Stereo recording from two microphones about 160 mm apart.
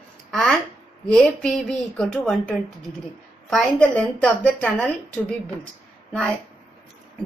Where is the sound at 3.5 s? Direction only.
5° left (ahead or behind).